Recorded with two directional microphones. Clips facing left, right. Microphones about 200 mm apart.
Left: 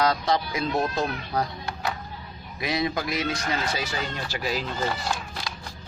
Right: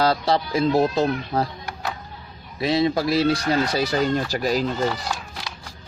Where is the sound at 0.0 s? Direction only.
30° right (ahead or behind).